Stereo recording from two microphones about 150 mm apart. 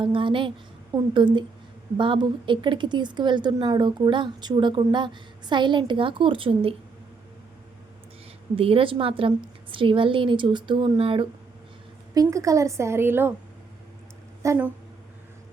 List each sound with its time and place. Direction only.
0.0 s speech: 35° right (ahead or behind)
8.5 s speech: 40° right (ahead or behind)
12.1 s a woman's voice: 25° right (ahead or behind)
14.4 s speech: 20° right (ahead or behind)